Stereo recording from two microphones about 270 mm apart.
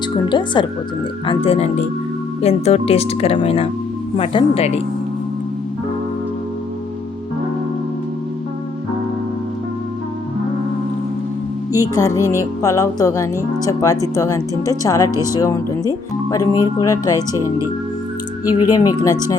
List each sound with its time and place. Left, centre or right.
0.1 s music: centre
1.3 s speech: left
11.8 s music: centre
15.1 s speech: centre
15.4 s music: centre
18.7 s music: centre